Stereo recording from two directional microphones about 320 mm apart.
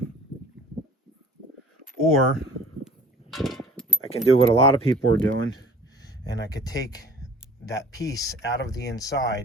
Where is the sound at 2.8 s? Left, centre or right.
Centre.